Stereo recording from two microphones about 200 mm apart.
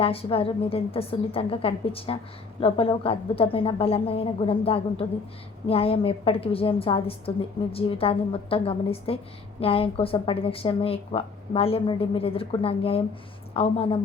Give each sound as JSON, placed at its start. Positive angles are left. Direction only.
{"t": 0.0, "sound": "a woman's voice", "side_deg": 30}